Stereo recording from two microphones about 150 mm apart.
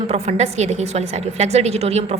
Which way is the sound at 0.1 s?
45° right (ahead or behind).